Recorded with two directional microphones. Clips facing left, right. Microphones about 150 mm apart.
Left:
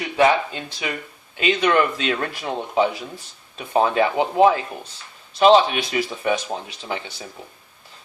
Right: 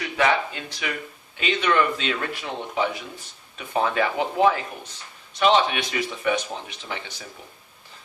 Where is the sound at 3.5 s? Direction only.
30° left (ahead or behind).